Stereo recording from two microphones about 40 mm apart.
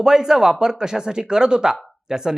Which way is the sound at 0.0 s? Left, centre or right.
Centre.